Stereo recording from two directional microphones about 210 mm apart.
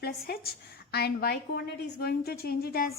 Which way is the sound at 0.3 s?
45° left (ahead or behind).